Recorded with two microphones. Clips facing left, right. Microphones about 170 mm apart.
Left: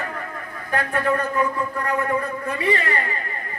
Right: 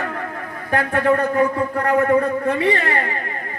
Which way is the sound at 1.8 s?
50° right (ahead or behind).